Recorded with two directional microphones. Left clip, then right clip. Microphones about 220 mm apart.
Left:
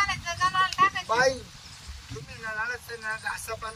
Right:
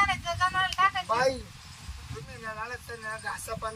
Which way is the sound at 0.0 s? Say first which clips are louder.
Even; 10° right (ahead or behind).